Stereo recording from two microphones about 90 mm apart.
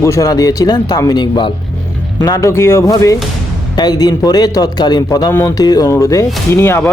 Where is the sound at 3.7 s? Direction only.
50° left (ahead or behind).